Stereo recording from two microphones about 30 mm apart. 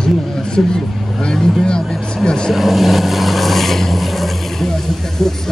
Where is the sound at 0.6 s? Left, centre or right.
Centre.